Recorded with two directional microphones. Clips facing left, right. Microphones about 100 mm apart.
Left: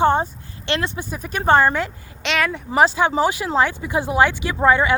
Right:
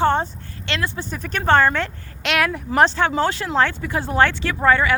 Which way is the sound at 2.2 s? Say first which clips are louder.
Right 1 dB; 5° right (ahead or behind).